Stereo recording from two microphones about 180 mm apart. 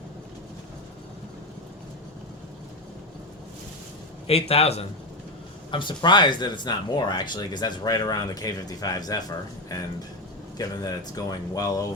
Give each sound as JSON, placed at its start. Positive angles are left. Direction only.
{"t": 4.3, "sound": "a man's voice", "side_deg": 35}